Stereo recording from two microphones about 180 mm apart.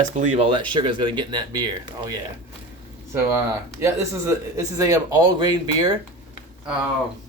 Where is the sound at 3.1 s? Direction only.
15° right (ahead or behind).